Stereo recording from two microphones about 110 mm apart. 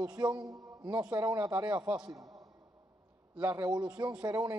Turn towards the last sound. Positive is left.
turn(degrees=-30)  # may be behind; listen again after turning